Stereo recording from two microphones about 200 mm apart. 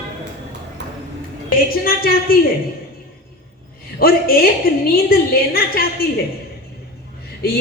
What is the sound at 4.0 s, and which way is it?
Speech, 45° left (ahead or behind).